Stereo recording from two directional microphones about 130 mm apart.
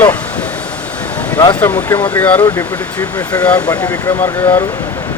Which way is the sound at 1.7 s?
25° left (ahead or behind).